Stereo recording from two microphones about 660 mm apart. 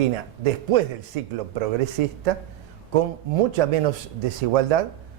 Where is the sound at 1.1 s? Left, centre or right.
Right.